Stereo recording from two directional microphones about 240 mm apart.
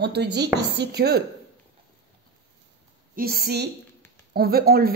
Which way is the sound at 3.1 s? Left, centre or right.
Right.